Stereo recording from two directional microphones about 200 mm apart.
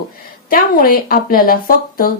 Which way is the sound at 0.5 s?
45° left (ahead or behind).